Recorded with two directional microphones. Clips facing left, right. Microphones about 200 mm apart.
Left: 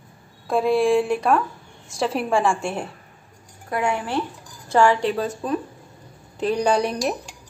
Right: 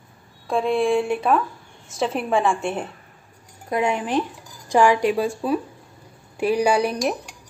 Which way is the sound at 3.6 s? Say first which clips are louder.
Right 2 dB; 20° right (ahead or behind).